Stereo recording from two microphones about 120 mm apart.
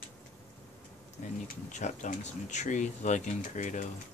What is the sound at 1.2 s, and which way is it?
Speech, 90° left.